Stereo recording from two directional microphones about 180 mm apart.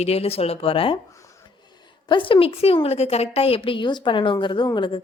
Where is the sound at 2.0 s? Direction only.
30° left (ahead or behind).